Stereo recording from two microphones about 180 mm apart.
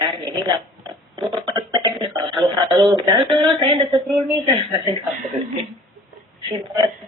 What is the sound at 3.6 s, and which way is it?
Speech, 25° right (ahead or behind).